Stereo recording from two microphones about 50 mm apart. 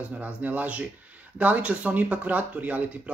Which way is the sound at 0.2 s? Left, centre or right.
Right.